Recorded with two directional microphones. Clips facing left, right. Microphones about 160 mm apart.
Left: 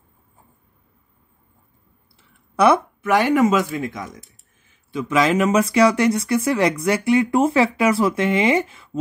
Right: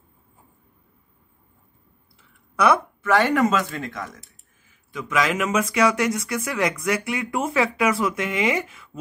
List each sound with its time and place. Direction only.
2.5 s a woman's voice: 25° left (ahead or behind)
3.0 s speech: 15° left (ahead or behind)
4.6 s speech: 30° left (ahead or behind)